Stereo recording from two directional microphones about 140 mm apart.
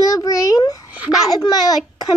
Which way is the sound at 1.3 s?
25° left (ahead or behind).